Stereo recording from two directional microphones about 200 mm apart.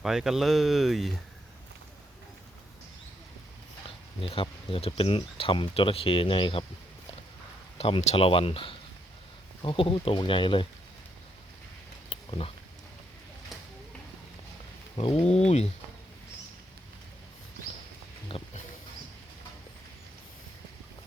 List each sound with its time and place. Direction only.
0.0 s speech: centre (ahead or behind)
4.2 s speech: 25° left (ahead or behind)
7.8 s speech: 30° left (ahead or behind)
12.0 s a sound: 25° left (ahead or behind)
14.9 s speech: 25° left (ahead or behind)
18.3 s pig: 25° left (ahead or behind)